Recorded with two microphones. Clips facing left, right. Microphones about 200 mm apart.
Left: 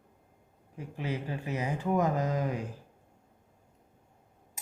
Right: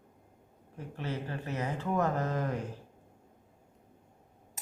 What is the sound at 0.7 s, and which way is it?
Speech, 15° left (ahead or behind).